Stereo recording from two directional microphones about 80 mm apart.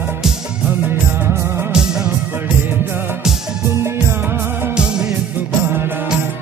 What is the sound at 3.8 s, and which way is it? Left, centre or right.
Music, right.